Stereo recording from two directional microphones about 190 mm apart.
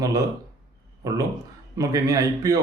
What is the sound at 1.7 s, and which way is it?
Speech, 15° right (ahead or behind).